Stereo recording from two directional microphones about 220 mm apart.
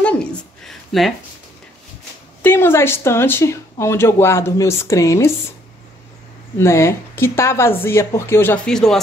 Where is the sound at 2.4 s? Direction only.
10° left (ahead or behind).